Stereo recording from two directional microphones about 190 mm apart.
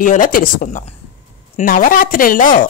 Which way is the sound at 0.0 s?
45° left (ahead or behind).